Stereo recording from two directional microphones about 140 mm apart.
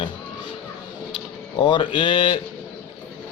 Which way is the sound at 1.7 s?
35° left (ahead or behind).